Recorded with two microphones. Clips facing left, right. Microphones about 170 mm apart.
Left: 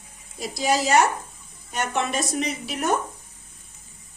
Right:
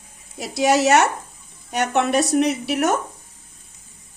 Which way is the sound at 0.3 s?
70° right (ahead or behind).